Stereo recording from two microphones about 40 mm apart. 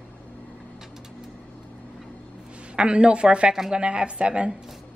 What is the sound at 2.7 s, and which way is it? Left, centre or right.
A woman's voice, right.